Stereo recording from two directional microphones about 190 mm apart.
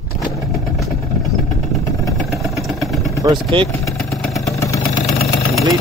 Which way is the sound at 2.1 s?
Centre (ahead or behind).